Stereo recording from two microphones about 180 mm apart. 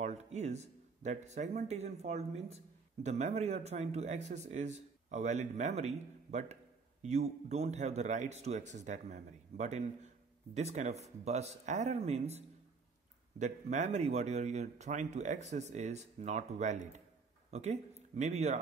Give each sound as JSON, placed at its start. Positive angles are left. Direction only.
{"t": 0.0, "sound": "speech", "side_deg": -40}